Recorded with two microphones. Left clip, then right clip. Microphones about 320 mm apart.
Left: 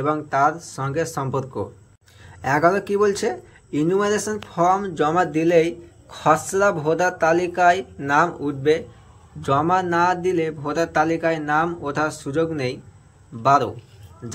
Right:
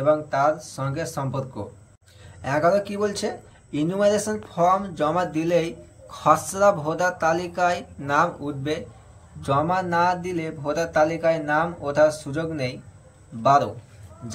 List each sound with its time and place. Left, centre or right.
0.0 s a man's voice: centre